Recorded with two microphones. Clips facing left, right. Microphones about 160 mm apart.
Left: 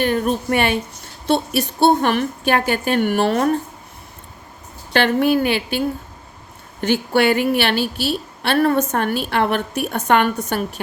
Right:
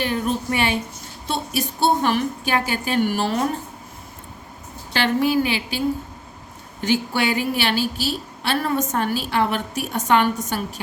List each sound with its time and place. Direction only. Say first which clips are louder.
0.0 s a woman's voice: left 4 dB; 55° left (ahead or behind)
4.9 s a woman's voice: left 3 dB; 55° left (ahead or behind)
6.8 s a woman's voice: left 5 dB; 60° left (ahead or behind)